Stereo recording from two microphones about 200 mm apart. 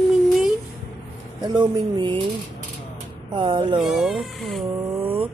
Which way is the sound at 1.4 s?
25° right (ahead or behind).